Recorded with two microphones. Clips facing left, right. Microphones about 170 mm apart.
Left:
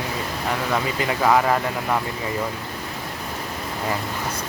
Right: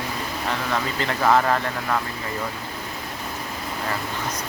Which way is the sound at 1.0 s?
10° left (ahead or behind).